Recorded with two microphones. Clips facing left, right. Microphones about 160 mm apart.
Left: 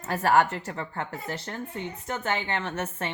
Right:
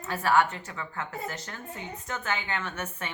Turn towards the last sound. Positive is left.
turn(degrees=35)  # may be behind; listen again after turning